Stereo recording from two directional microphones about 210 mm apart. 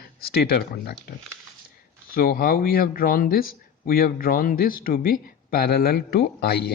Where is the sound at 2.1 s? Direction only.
45° left (ahead or behind).